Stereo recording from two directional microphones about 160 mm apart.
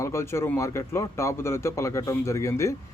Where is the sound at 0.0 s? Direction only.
15° left (ahead or behind).